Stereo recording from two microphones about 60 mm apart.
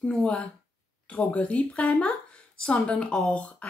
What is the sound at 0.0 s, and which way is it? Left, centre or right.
A woman's voice, centre.